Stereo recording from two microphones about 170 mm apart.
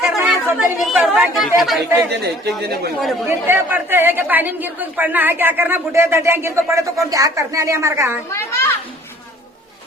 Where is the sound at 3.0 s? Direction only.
Centre (ahead or behind).